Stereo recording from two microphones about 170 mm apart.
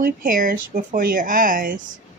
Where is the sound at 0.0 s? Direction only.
55° right (ahead or behind).